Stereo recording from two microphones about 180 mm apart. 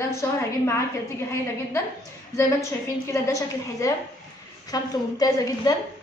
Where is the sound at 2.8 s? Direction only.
15° left (ahead or behind).